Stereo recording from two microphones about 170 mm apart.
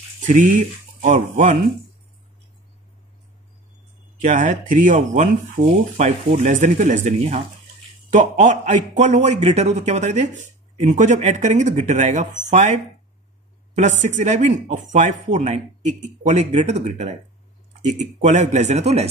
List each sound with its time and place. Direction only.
1.0 s speech: 45° right (ahead or behind)
4.2 s speech: 45° right (ahead or behind)
13.7 s speech: 45° right (ahead or behind)